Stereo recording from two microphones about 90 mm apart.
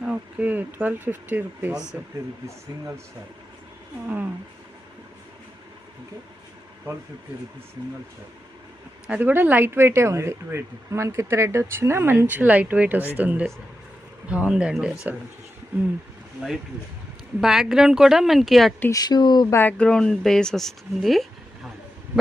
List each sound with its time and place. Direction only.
0.0 s speech: 15° right (ahead or behind)
6.9 s speech: 25° right (ahead or behind)
9.0 s speech: 20° right (ahead or behind)
17.4 s speech: 5° right (ahead or behind)
18.9 s speech: 45° left (ahead or behind)
19.5 s speech: 25° left (ahead or behind)
19.8 s speech: 10° left (ahead or behind)